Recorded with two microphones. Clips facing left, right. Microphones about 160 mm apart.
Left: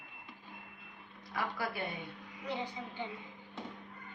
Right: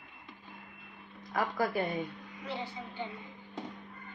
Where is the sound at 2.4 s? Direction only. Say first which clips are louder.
Even; 15° left (ahead or behind).